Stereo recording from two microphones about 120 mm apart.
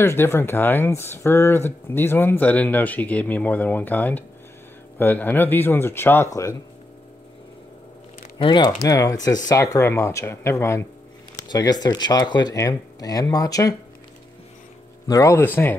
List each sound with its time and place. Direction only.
0.0 s speech: 20° left (ahead or behind)
8.4 s speech: 40° left (ahead or behind); by 10.9 s 25° left (ahead or behind)
11.4 s speech: 35° left (ahead or behind)
15.0 s speech: 25° left (ahead or behind)